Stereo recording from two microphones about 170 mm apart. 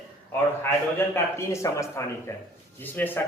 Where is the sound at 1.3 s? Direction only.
15° left (ahead or behind).